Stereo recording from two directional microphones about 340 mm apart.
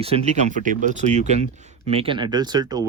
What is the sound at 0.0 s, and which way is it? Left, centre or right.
Speech, centre.